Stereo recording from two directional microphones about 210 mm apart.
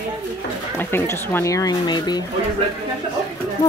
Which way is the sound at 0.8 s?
10° left (ahead or behind).